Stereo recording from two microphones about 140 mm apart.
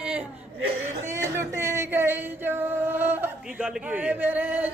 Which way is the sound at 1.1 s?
20° right (ahead or behind).